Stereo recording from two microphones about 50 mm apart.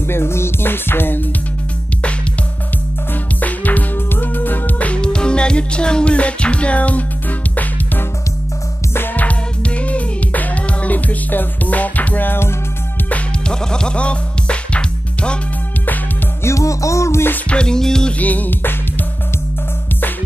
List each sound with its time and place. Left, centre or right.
0.0 s music: left
3.3 s music: left
9.1 s music: left
13.5 s music: centre
16.4 s music: left
17.5 s music: centre
18.2 s music: left